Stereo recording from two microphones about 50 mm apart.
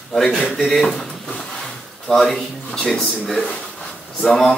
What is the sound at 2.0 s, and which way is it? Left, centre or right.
A man's voice, centre.